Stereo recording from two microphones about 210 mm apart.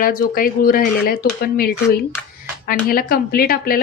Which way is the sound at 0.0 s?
45° left (ahead or behind).